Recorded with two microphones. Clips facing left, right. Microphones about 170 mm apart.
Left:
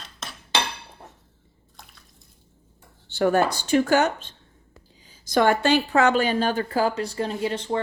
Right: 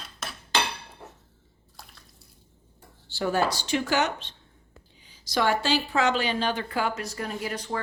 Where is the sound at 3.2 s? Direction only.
60° left (ahead or behind).